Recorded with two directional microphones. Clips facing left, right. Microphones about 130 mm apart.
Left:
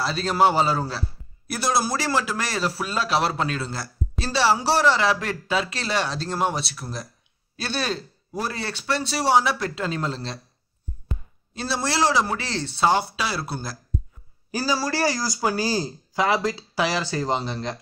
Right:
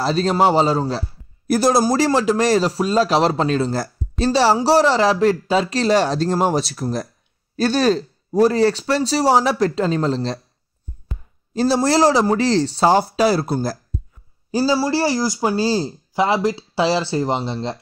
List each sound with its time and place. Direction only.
0.0 s speech: 40° right (ahead or behind)
11.5 s speech: 40° right (ahead or behind)
14.5 s speech: 25° right (ahead or behind)